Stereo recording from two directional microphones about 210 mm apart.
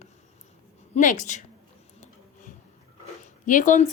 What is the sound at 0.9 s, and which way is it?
Speech, 35° left (ahead or behind).